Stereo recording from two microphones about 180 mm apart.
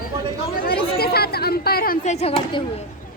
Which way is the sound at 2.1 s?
35° left (ahead or behind).